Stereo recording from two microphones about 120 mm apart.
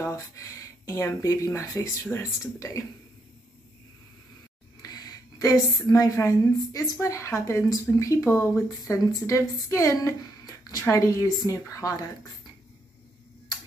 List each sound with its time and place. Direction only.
0.0 s speech: 25° left (ahead or behind)
4.8 s a woman's voice: 35° left (ahead or behind)